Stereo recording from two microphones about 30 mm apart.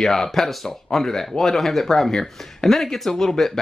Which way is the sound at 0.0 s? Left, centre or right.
Centre.